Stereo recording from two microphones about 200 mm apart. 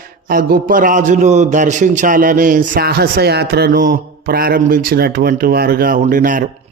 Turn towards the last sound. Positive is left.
turn(degrees=-40)  # may be behind; listen again after turning